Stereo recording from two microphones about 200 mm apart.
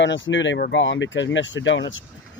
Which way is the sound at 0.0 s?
65° left (ahead or behind).